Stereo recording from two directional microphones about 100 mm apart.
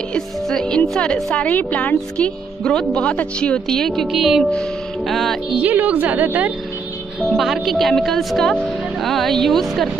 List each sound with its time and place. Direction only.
0.1 s speech: 5° left (ahead or behind)
5.6 s a woman's voice: 15° right (ahead or behind)
7.2 s speech: centre (ahead or behind)